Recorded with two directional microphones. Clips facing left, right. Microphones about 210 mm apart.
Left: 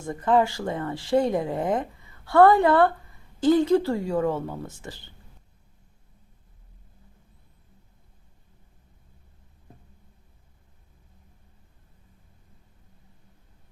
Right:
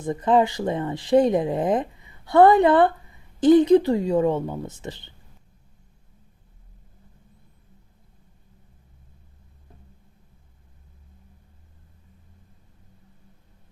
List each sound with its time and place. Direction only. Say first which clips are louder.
0.0 s speech: right 2 dB; 20° right (ahead or behind)